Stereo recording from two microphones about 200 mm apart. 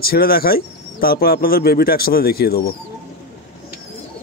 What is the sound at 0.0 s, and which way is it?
Speech, 50° left (ahead or behind).